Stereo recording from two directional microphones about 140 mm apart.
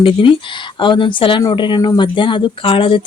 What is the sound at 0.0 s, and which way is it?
Speech, 35° left (ahead or behind).